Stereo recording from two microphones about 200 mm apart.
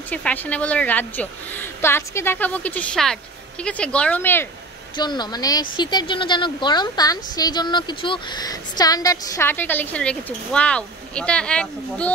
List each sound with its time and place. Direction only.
0.1 s a woman's voice: 5° left (ahead or behind)
4.9 s speech: 20° left (ahead or behind); by 12.1 s 5° left (ahead or behind)